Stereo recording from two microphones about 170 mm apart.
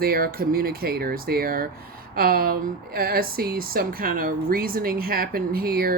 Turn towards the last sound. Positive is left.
turn(degrees=-60)  # may be behind; listen again after turning